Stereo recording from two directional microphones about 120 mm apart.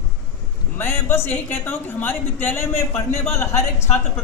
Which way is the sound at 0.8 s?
20° left (ahead or behind).